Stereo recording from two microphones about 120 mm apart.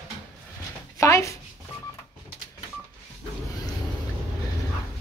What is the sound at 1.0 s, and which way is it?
Speech, 25° left (ahead or behind).